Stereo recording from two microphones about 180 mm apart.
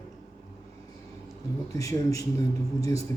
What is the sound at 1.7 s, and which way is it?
Speech, 20° left (ahead or behind).